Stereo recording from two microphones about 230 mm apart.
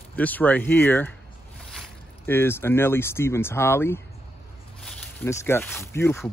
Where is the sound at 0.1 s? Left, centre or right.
Centre.